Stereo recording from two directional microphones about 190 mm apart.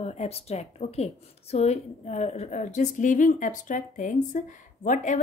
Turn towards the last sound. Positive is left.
turn(degrees=40)  # may be behind; listen again after turning